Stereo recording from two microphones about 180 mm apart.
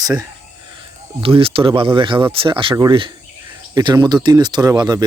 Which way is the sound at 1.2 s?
30° right (ahead or behind).